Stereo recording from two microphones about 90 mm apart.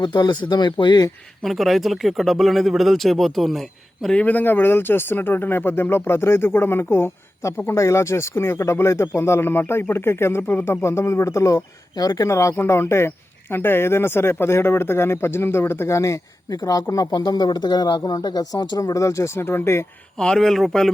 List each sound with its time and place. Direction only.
0.0 s speech: 55° left (ahead or behind)
1.4 s speech: centre (ahead or behind)
4.2 s speech: 20° left (ahead or behind)
16.0 s speech: 40° left (ahead or behind)
17.1 s speech: 50° left (ahead or behind)
18.8 s speech: 35° left (ahead or behind)
20.1 s speech: 5° left (ahead or behind)